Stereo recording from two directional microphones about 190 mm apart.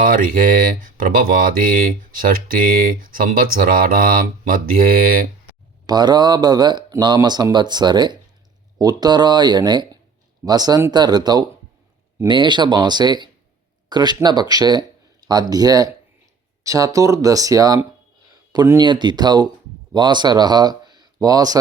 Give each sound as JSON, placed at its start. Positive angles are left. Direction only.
{"t": 0.0, "sound": "speech", "side_deg": -45}
{"t": 5.8, "sound": "speech", "side_deg": -20}